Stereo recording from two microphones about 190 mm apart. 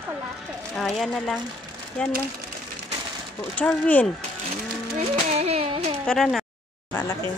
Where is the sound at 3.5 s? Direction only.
10° left (ahead or behind).